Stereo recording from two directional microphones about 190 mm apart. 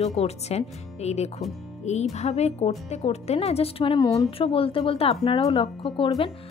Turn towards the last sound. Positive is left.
turn(degrees=25)  # may be behind; listen again after turning